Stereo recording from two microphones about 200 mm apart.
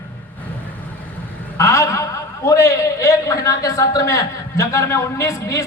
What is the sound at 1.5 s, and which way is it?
A man's voice, 15° left (ahead or behind).